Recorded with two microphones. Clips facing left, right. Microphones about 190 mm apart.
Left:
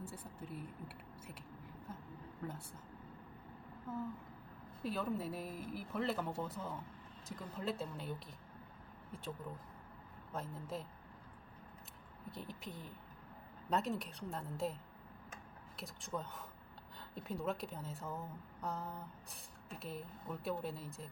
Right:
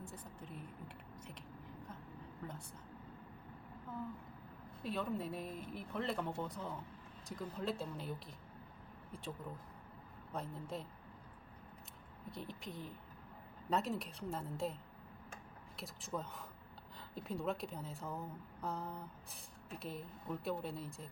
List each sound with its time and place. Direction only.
0.0 s a sound: 5° left (ahead or behind)
3.9 s a sound: 5° left (ahead or behind)
4.8 s speech: centre (ahead or behind)
10.3 s speech: centre (ahead or behind)
12.3 s speech: centre (ahead or behind)
15.8 s speech: centre (ahead or behind)